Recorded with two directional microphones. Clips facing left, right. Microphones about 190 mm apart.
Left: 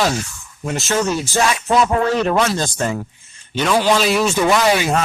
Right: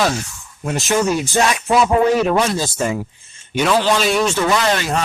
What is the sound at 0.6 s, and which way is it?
Speech, 15° right (ahead or behind).